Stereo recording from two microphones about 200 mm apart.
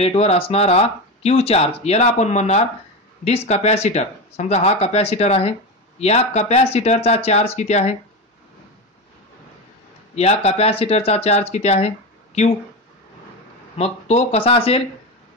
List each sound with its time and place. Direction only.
0.0 s speech: 30° left (ahead or behind)
10.1 s speech: 30° left (ahead or behind)
13.7 s speech: 30° left (ahead or behind)